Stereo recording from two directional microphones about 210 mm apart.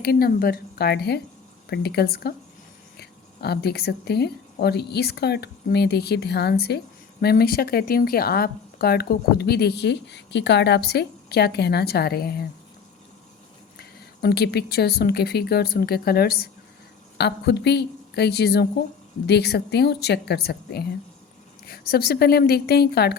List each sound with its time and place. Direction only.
0.0 s speech: 45° left (ahead or behind)
13.7 s speech: 50° left (ahead or behind)